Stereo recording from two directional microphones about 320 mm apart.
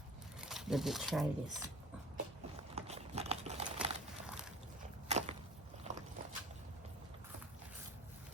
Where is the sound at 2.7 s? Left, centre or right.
Centre.